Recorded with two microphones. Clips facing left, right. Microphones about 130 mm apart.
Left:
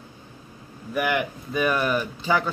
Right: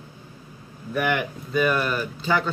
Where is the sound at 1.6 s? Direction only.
10° left (ahead or behind).